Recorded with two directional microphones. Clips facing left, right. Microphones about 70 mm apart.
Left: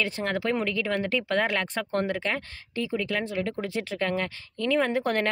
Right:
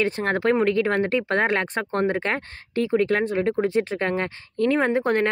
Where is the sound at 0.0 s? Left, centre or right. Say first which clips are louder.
Right 6 dB; right.